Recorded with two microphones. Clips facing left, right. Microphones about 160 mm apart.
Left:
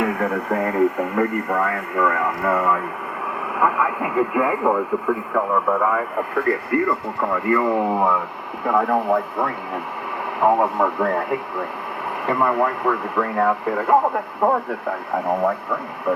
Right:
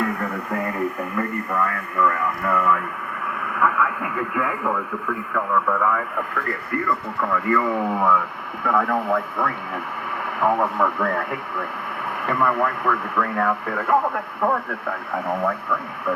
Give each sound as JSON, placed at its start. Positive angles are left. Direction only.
{"t": 0.5, "sound": "speech", "side_deg": 25}